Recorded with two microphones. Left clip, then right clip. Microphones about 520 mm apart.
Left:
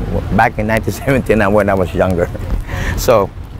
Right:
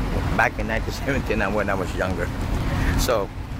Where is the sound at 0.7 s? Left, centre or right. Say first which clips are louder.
Left 10 dB; left.